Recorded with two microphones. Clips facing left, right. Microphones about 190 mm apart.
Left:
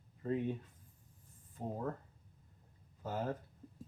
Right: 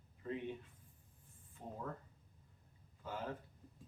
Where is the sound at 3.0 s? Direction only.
40° left (ahead or behind).